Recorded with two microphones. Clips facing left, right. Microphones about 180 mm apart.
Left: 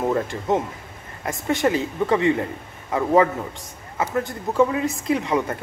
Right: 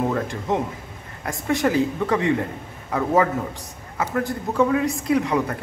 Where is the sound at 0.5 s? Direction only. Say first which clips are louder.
Left 2 dB; centre (ahead or behind).